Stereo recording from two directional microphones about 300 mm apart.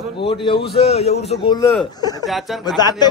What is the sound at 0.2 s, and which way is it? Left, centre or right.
A man's voice, centre.